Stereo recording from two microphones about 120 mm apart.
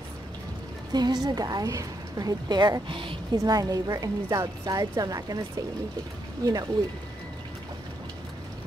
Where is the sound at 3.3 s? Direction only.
30° right (ahead or behind).